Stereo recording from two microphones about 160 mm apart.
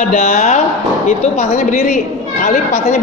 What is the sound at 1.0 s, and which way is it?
A man's voice, 45° left (ahead or behind).